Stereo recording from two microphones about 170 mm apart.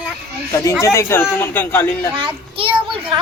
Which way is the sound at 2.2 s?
30° right (ahead or behind).